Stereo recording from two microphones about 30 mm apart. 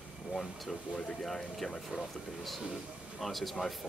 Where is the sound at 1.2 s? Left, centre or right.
Centre.